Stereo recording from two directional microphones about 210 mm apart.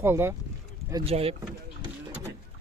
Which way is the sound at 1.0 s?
30° right (ahead or behind).